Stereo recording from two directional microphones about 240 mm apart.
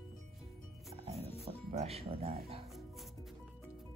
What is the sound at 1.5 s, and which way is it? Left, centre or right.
Speech, right.